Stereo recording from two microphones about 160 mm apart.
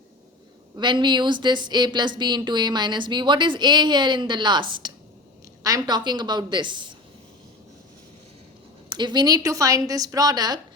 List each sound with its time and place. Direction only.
0.8 s speech: 30° right (ahead or behind)
8.9 s speech: 30° right (ahead or behind)